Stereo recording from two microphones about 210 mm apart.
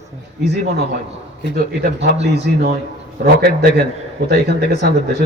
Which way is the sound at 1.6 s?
50° right (ahead or behind).